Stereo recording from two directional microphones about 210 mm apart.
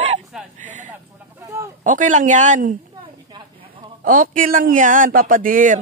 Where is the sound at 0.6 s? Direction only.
35° right (ahead or behind).